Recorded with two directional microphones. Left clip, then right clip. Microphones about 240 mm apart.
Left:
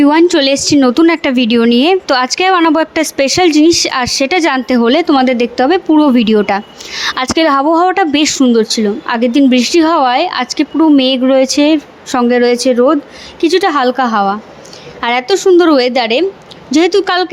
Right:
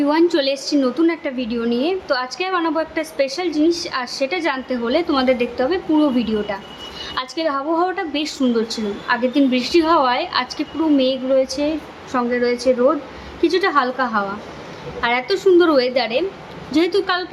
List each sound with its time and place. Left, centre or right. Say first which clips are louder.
0.0 s a woman's voice: left 8 dB; left